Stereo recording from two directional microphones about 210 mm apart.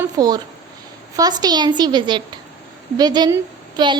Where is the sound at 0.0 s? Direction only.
15° right (ahead or behind).